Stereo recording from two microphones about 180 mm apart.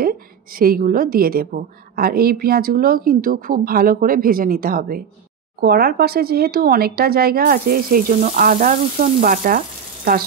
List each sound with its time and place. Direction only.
0.0 s a woman's voice: 55° right (ahead or behind)